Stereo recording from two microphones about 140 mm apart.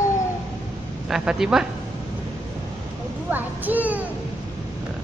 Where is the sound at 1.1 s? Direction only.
5° right (ahead or behind).